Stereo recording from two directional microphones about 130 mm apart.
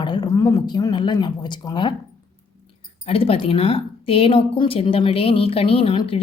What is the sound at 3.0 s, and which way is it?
Speech, 50° left (ahead or behind).